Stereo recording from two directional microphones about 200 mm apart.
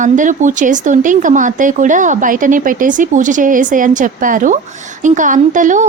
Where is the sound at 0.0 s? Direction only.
40° right (ahead or behind).